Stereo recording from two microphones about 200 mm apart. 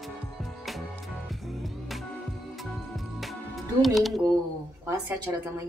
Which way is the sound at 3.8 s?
Centre (ahead or behind).